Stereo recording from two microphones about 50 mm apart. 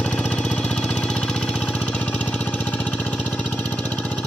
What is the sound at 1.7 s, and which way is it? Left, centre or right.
Lawn mower, left.